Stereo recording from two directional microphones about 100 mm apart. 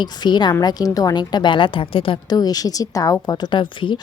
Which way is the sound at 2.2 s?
40° left (ahead or behind).